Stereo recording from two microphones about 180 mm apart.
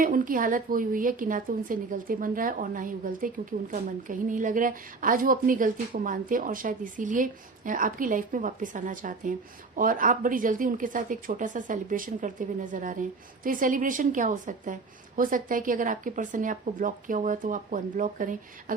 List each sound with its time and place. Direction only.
0.0 s a woman's voice: 50° right (ahead or behind)